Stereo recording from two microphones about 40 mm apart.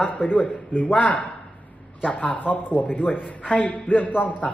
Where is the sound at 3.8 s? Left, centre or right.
Left.